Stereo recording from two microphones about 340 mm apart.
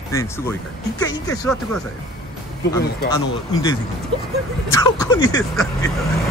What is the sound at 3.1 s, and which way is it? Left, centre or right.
Speech, centre.